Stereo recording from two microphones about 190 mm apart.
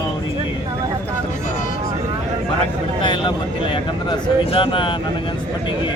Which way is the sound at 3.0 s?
25° left (ahead or behind).